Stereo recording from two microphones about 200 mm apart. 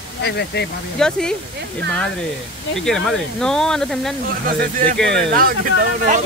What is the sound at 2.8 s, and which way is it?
Speech, centre (ahead or behind).